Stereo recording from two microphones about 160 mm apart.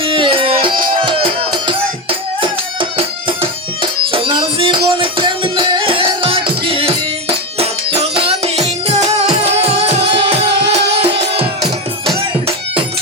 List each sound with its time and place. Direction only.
0.0 s music: 35° right (ahead or behind)
3.0 s music: 35° right (ahead or behind)